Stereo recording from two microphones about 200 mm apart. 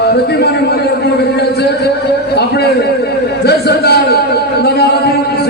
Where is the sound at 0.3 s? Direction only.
55° left (ahead or behind).